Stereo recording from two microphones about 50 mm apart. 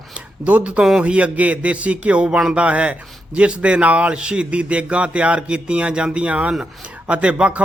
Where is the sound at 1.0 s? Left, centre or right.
Right.